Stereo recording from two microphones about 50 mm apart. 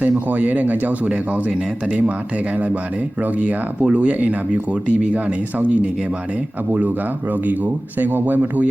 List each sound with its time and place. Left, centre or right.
0.0 s speech: right